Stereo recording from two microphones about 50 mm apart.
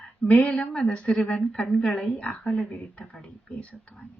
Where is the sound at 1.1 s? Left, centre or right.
Centre.